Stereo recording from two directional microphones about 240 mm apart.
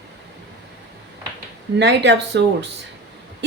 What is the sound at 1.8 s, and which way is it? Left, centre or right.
Speech, right.